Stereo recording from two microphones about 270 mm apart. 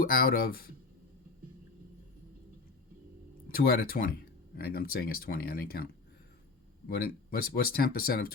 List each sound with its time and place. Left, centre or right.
0.0 s speech: left
3.5 s speech: left